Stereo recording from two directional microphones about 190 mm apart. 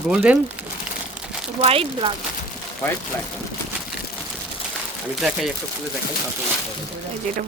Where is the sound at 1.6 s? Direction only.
30° right (ahead or behind).